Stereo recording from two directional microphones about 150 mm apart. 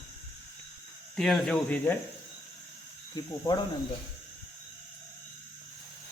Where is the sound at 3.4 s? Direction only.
30° left (ahead or behind).